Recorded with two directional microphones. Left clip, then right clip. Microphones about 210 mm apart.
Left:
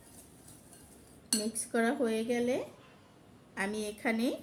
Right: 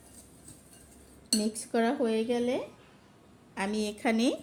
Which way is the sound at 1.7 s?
25° right (ahead or behind).